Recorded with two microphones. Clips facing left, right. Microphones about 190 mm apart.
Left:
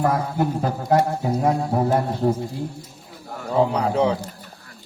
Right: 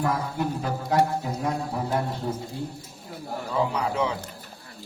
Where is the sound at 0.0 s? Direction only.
45° left (ahead or behind).